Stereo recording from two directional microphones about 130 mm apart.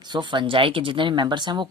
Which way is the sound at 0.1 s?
35° right (ahead or behind).